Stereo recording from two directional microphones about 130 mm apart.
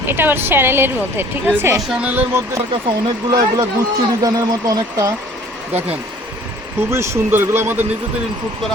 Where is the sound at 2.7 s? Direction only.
35° right (ahead or behind).